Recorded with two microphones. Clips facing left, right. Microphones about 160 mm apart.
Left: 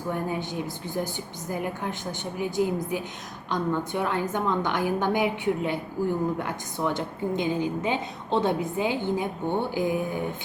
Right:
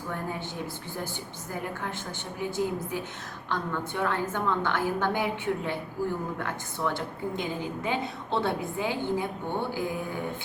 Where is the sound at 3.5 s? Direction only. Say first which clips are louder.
Left 5 dB; 15° left (ahead or behind).